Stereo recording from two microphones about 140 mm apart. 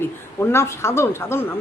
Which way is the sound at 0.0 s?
15° left (ahead or behind).